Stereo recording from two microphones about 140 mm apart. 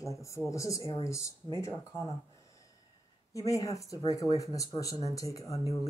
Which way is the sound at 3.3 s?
25° left (ahead or behind).